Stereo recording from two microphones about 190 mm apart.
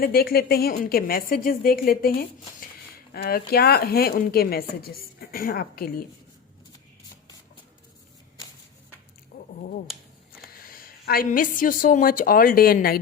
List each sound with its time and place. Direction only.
0.0 s speech: 50° left (ahead or behind)
9.3 s a sound: 50° left (ahead or behind)
10.6 s a woman's voice: 50° left (ahead or behind)